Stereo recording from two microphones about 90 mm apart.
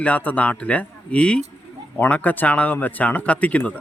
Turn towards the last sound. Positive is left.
turn(degrees=15)  # may be behind; listen again after turning